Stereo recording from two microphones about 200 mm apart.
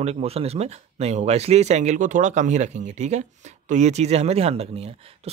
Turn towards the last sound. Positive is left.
turn(degrees=-30)  # may be behind; listen again after turning